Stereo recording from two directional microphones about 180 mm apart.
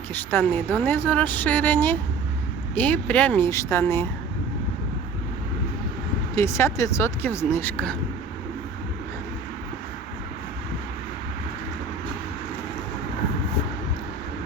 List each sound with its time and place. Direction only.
0.1 s speech: 10° left (ahead or behind)
6.3 s speech: 15° left (ahead or behind)